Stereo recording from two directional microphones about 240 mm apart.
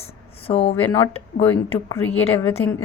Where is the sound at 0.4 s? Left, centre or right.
Left.